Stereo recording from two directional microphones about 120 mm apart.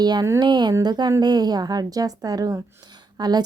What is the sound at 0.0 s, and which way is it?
A woman's voice, 35° right (ahead or behind).